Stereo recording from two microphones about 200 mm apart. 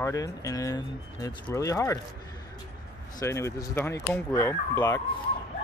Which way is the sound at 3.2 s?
15° left (ahead or behind).